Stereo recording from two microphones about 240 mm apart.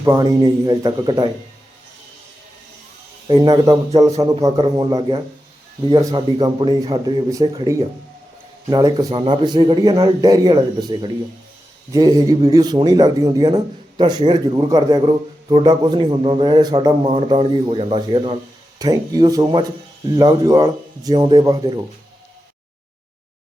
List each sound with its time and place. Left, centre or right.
0.0 s a man's voice: centre
3.2 s a man's voice: centre